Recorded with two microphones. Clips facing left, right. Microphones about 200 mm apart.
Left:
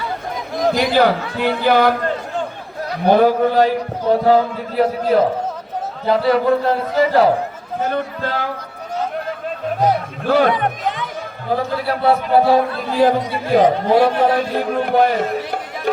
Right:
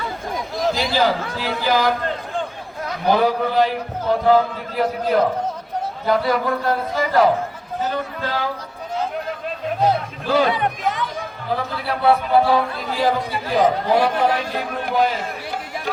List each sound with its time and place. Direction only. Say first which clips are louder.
0.6 s a sound: left 5 dB; 55° left (ahead or behind)
0.9 s speech: left 4 dB; 60° left (ahead or behind)
2.0 s a sound: left 3 dB; 45° left (ahead or behind)
3.1 s a man's voice: left 5 dB; 50° left (ahead or behind); by 7.3 s 30° left (ahead or behind)
7.8 s a man's voice: left 3 dB; 50° left (ahead or behind)
10.2 s speech: left 3 dB; 60° left (ahead or behind)
11.5 s a man's voice: left 5 dB; 40° left (ahead or behind)
14.8 s speech: left 5 dB; 55° left (ahead or behind)